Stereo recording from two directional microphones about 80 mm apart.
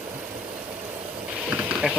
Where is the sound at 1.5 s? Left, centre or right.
Centre.